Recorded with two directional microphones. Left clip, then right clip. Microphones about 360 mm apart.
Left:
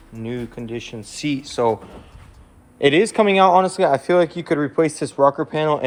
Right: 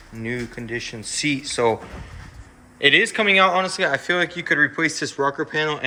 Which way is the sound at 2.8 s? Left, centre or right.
Centre.